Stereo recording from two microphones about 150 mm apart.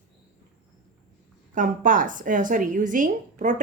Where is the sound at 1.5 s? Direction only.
60° right (ahead or behind).